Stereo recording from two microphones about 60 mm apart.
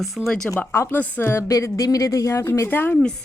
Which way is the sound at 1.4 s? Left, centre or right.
Left.